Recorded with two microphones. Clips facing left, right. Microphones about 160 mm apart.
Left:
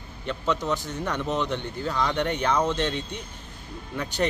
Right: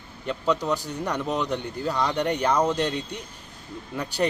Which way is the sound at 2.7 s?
35° right (ahead or behind).